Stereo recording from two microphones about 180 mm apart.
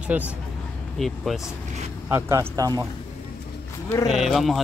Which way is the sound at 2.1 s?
15° right (ahead or behind).